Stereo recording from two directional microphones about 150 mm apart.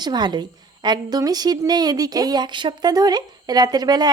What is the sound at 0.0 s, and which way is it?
A woman's voice, 30° right (ahead or behind).